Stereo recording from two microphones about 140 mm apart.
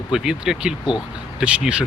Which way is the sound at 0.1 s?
5° right (ahead or behind).